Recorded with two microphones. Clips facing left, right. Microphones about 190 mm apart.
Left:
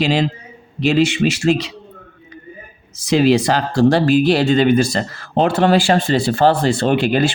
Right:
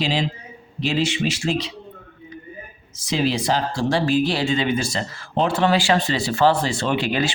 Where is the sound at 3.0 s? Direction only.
75° left (ahead or behind).